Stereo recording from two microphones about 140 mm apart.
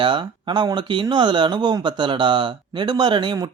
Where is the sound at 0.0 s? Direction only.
35° right (ahead or behind).